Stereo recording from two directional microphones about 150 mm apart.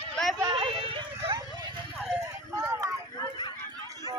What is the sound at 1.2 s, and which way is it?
Vehicle, 25° right (ahead or behind).